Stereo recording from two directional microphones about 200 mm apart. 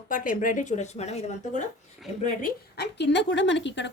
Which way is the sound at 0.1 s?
40° left (ahead or behind).